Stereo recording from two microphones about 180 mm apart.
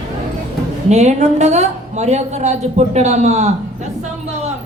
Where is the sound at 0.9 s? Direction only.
40° right (ahead or behind).